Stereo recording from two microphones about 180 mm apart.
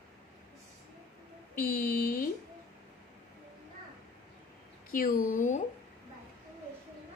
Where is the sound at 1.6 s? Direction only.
55° left (ahead or behind).